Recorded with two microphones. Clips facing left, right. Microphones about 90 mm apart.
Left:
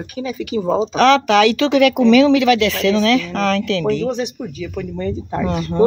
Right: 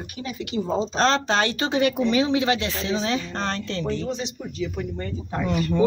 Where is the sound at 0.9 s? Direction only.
80° left.